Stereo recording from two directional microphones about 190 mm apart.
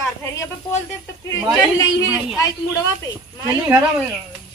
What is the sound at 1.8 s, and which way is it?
Speech, 15° left (ahead or behind).